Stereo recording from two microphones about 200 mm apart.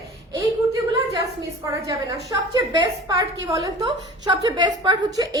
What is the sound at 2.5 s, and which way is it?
A woman's voice, 20° right (ahead or behind).